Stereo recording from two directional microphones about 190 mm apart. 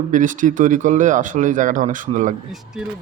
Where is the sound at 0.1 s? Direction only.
45° right (ahead or behind).